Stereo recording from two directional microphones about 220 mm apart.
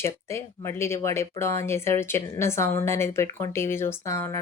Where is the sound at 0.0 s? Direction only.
10° left (ahead or behind).